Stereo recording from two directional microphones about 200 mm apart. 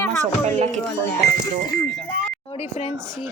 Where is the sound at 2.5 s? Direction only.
30° left (ahead or behind).